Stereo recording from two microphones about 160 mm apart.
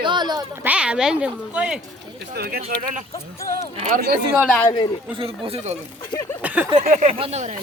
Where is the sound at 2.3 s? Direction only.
75° right (ahead or behind).